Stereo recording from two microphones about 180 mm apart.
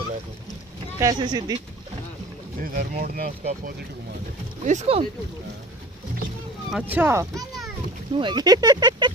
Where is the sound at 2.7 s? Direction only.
50° right (ahead or behind).